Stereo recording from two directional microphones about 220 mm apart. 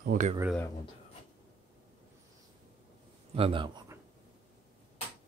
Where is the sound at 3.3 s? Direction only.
25° right (ahead or behind).